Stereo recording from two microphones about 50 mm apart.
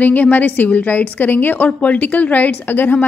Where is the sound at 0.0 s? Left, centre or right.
Left.